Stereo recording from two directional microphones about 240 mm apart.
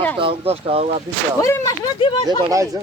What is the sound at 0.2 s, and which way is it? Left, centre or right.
Speech, right.